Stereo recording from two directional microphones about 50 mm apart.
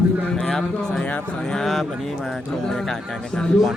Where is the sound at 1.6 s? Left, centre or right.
Centre.